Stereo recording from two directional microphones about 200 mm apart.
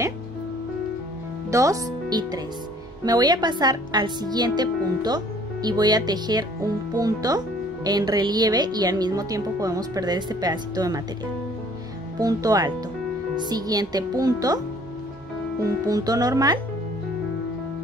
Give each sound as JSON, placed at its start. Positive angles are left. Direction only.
{"t": 1.5, "sound": "a woman's voice", "side_deg": -15}
{"t": 12.2, "sound": "a woman's voice", "side_deg": -15}
{"t": 15.6, "sound": "speech", "side_deg": -15}